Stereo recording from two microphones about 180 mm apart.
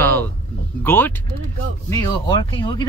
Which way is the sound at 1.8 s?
20° left (ahead or behind).